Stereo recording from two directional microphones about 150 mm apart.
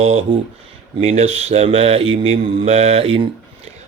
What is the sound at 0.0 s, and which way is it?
Speech, 45° right (ahead or behind).